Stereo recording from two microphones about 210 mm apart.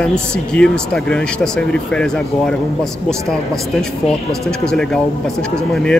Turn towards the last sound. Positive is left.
turn(degrees=5)  # may be behind; listen again after turning